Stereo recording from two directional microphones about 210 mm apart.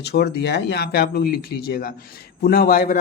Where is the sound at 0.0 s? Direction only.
50° left (ahead or behind).